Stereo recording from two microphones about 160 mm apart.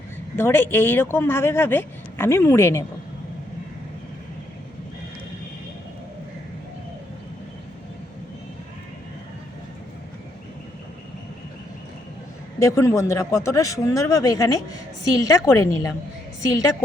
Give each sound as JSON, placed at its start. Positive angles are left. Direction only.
{"t": 0.3, "sound": "speech", "side_deg": 15}
{"t": 12.5, "sound": "a man's voice", "side_deg": 20}